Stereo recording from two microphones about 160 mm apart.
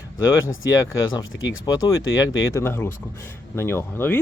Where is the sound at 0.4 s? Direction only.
20° left (ahead or behind).